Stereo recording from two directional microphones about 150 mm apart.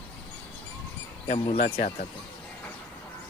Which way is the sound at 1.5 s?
50° left (ahead or behind).